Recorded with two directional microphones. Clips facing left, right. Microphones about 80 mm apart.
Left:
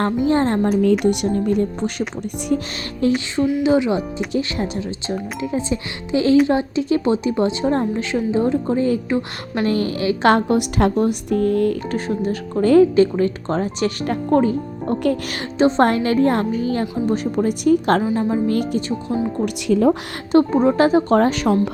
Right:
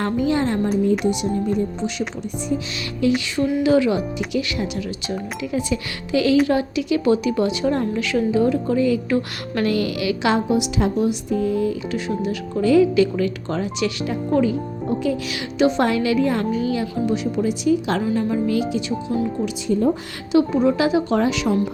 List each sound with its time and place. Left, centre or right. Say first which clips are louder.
0.2 s speech: left 2 dB; left
1.0 s speech: left 3 dB; left
3.0 s speech: left 1 dB; left
3.6 s a woman's voice: right 2 dB; left
9.0 s a woman's voice: even; left
9.6 s speech: left 2 dB; left
10.2 s speech: left 4 dB; left
15.5 s speech: left 3 dB; left
18.0 s speech: left 2 dB; left
18.5 s speech: left 1 dB; left
19.6 s a woman's voice: left 4 dB; left
20.3 s speech: left 2 dB; left